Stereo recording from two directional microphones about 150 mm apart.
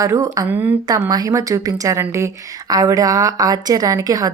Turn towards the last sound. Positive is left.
turn(degrees=-25)  # may be behind; listen again after turning